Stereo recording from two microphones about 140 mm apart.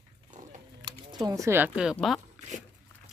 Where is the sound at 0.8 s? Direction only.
30° right (ahead or behind).